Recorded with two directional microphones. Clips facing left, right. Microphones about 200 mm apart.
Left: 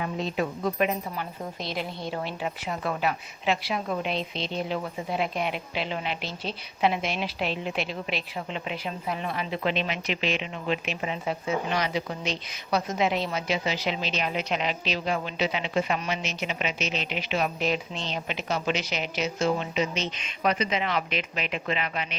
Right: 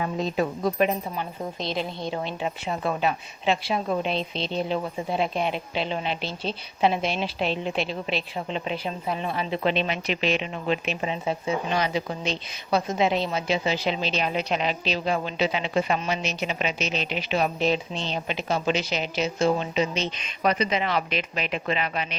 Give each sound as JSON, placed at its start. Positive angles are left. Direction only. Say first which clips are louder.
{"t": 0.0, "sound": "a woman's voice", "louder": "right 3 dB", "side_deg": -40}
{"t": 1.1, "sound": "a woman's voice", "louder": "right 3 dB", "side_deg": -20}
{"t": 11.1, "sound": "a woman's voice", "louder": "right 1 dB", "side_deg": -25}